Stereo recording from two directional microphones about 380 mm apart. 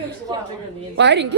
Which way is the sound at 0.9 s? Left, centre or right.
Right.